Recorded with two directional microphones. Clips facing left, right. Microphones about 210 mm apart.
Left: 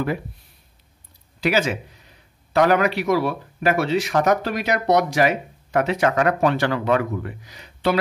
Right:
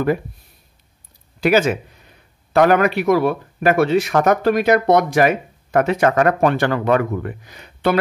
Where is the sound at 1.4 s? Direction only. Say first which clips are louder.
Right 5 dB; 50° right (ahead or behind).